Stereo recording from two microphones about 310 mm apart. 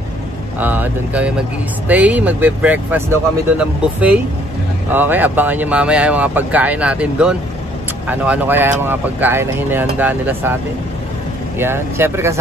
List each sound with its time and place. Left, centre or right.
0.6 s speech: centre